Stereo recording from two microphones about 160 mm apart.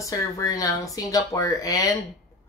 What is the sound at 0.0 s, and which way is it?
Speech, 20° left (ahead or behind).